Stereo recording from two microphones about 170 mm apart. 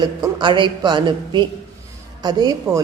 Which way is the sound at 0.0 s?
25° right (ahead or behind).